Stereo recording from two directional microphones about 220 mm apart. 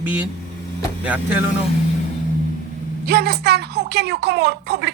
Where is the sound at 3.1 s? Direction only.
45° right (ahead or behind).